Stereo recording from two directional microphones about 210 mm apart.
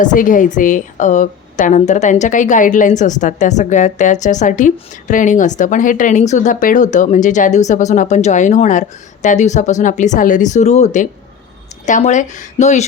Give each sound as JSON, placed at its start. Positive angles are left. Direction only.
{"t": 0.0, "sound": "a woman's voice", "side_deg": 40}